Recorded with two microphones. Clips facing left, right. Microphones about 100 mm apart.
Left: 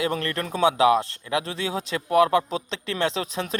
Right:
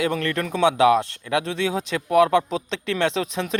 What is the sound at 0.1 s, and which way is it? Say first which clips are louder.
Speech: right 3 dB; 35° left (ahead or behind).